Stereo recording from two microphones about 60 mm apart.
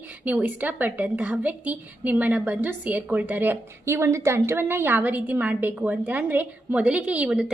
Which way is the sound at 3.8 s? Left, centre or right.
Right.